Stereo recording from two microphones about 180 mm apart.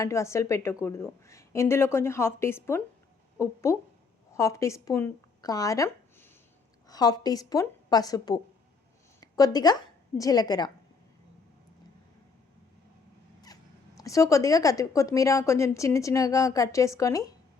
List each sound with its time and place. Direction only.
0.0 s a woman's voice: 15° left (ahead or behind)
13.4 s speech: 20° left (ahead or behind)